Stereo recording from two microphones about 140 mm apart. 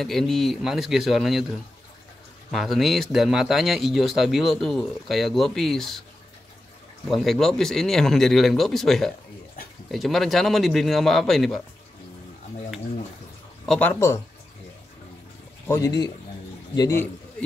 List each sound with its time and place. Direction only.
0.0 s a man's voice: 5° left (ahead or behind)
7.1 s a man's voice: centre (ahead or behind)
13.7 s speech: 10° left (ahead or behind)
15.6 s speech: 20° left (ahead or behind)